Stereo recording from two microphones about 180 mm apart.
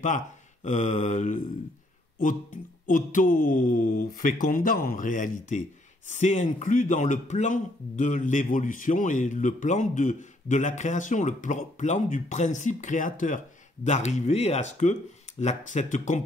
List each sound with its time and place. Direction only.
0.7 s a man's voice: 40° left (ahead or behind)